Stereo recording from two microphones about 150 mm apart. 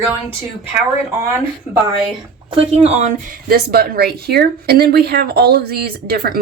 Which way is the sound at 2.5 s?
45° right (ahead or behind).